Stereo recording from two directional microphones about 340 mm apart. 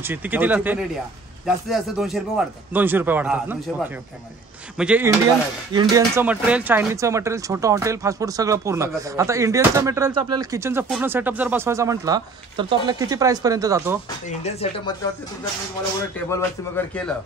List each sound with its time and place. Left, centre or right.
0.0 s speech: centre
4.7 s speech: centre
14.4 s speech: centre
16.3 s speech: centre